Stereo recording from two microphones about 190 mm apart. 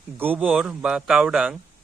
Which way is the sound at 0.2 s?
10° right (ahead or behind).